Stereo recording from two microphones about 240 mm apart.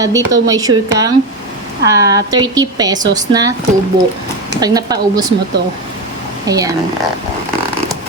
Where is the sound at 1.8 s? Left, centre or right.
Centre.